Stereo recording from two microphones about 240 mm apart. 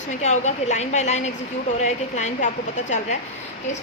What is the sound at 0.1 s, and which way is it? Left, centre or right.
A woman's voice, left.